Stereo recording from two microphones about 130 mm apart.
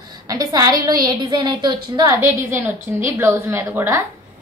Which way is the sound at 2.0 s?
20° right (ahead or behind).